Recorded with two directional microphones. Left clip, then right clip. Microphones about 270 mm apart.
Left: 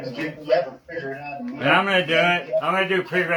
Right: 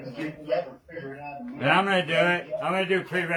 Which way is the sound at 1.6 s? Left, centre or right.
Centre.